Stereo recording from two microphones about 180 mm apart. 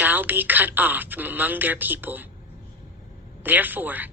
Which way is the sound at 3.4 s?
10° right (ahead or behind).